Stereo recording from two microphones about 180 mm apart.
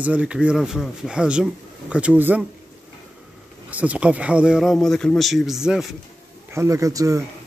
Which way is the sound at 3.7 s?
10° right (ahead or behind).